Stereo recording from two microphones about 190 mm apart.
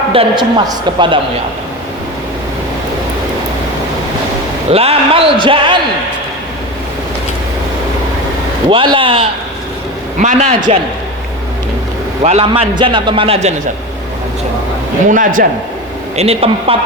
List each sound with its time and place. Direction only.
0.1 s a man's voice: 25° right (ahead or behind)
4.7 s a man's voice: 30° right (ahead or behind)
8.7 s a man's voice: 25° right (ahead or behind)
10.2 s a man's voice: 40° right (ahead or behind)
12.2 s a man's voice: 30° right (ahead or behind)
15.0 s a man's voice: 45° right (ahead or behind)
16.1 s a man's voice: 30° right (ahead or behind)